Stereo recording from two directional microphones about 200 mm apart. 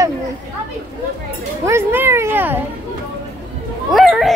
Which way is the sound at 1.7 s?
10° right (ahead or behind).